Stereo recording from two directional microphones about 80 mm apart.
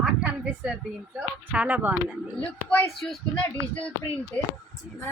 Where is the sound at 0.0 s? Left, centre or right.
Centre.